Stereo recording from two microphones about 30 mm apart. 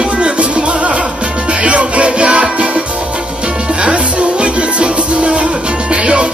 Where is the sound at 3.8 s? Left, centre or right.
Right.